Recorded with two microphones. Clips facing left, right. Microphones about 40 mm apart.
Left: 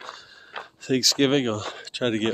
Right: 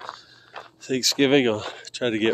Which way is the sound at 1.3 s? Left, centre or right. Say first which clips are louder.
Right 4 dB; right.